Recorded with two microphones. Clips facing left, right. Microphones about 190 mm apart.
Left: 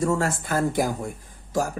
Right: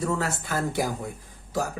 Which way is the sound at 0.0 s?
45° left (ahead or behind).